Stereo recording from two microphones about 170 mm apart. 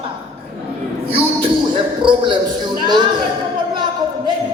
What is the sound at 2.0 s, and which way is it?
Speech, 30° right (ahead or behind).